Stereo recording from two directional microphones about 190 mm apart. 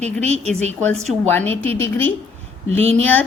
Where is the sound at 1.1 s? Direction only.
10° left (ahead or behind).